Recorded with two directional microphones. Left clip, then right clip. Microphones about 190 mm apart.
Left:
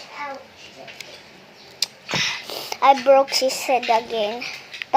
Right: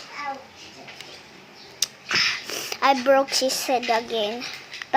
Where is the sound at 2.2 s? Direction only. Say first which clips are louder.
Right 1 dB; 60° right (ahead or behind).